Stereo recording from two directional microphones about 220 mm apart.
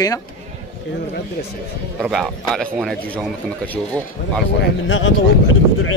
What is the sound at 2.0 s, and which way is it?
Speech, centre (ahead or behind).